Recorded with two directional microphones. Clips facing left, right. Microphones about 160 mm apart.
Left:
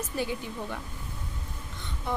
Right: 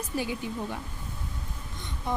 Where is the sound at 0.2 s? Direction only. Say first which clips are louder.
Right 1 dB; 15° right (ahead or behind).